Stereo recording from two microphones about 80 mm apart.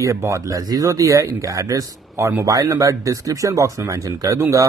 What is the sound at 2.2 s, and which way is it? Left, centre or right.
Speech, right.